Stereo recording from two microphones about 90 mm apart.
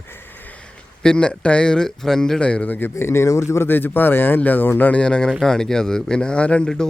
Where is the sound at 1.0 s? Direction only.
10° left (ahead or behind).